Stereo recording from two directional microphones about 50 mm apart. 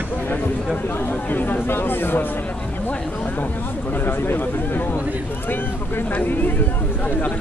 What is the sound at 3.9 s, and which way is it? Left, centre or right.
Speech, left.